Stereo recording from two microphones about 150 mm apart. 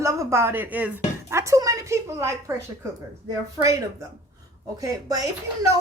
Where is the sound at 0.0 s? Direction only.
20° right (ahead or behind).